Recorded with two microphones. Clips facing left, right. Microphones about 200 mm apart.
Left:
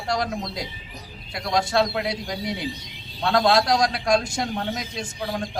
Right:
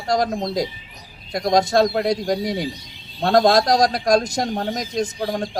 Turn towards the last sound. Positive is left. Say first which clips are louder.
# right 6 dB
turn(degrees=-40)  # may be behind; listen again after turning